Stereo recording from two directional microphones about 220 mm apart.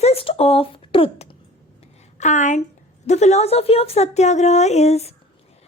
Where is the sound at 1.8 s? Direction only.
35° left (ahead or behind).